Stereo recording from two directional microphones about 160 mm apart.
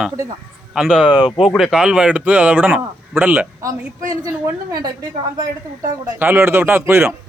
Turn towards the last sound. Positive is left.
turn(degrees=-15)  # may be behind; listen again after turning